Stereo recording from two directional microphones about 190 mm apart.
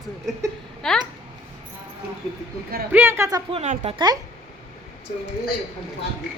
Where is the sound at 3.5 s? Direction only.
30° right (ahead or behind).